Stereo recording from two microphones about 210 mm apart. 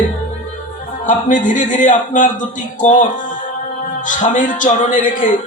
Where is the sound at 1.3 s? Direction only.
35° left (ahead or behind).